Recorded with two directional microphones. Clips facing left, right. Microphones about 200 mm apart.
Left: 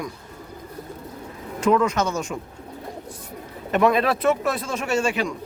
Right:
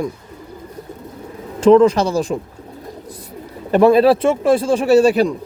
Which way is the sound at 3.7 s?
30° right (ahead or behind).